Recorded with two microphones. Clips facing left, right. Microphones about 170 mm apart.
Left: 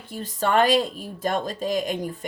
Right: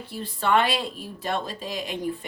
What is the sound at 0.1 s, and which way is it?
Speech, 40° left (ahead or behind).